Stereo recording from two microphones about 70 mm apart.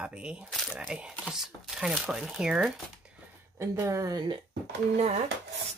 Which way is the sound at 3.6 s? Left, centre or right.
Right.